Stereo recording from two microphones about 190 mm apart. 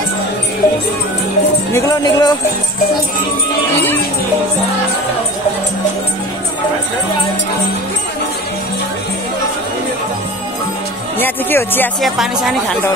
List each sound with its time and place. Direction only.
1.7 s speech: 15° left (ahead or behind)
11.1 s speech: 10° left (ahead or behind)
12.0 s speech: centre (ahead or behind)